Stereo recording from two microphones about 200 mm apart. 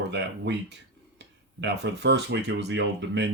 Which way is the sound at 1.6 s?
60° right (ahead or behind).